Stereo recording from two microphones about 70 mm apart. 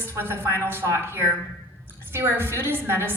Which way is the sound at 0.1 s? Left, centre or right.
Right.